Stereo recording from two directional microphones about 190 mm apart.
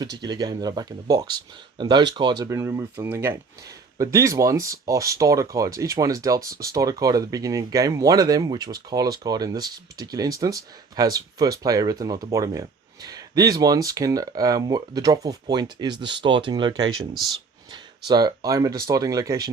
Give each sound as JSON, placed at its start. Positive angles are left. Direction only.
{"t": 0.0, "sound": "speech", "side_deg": -20}